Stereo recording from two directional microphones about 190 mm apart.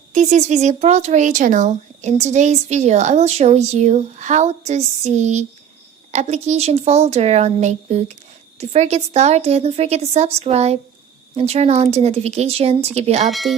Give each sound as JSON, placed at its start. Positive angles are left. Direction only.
{"t": 0.1, "sound": "speech", "side_deg": -40}
{"t": 13.3, "sound": "speech", "side_deg": 0}